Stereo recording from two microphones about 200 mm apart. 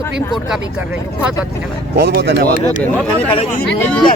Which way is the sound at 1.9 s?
55° right (ahead or behind).